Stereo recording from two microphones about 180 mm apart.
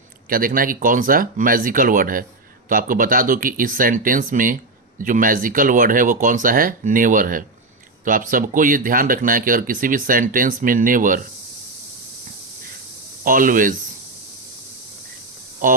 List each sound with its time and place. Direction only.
0.3 s speech: 50° right (ahead or behind)
13.2 s speech: 50° right (ahead or behind)
15.6 s speech: 50° right (ahead or behind)